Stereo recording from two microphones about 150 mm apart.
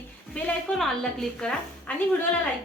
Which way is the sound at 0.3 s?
5° left (ahead or behind).